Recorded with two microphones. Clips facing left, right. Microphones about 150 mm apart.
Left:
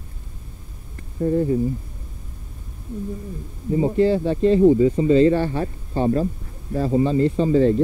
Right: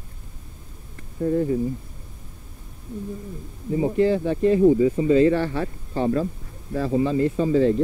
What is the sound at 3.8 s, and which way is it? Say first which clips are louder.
Speech: left 2 dB; 30° left (ahead or behind).